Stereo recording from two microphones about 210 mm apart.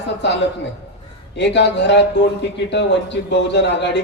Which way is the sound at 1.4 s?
55° left (ahead or behind).